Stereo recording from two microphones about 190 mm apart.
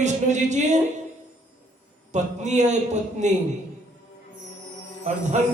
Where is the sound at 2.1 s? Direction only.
40° right (ahead or behind).